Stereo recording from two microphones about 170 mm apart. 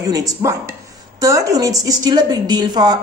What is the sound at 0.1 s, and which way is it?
A woman's voice, 20° right (ahead or behind).